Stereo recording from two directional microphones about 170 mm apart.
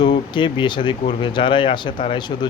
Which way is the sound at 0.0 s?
30° left (ahead or behind).